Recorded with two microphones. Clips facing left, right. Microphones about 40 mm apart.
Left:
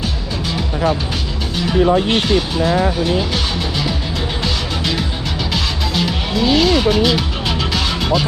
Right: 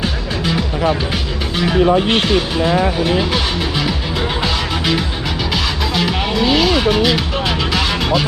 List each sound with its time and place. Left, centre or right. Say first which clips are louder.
1.5 s speech: right 1 dB; right
3.2 s speech: right 2 dB; centre
4.4 s music: right 1 dB; centre
5.9 s speech: right 2 dB; centre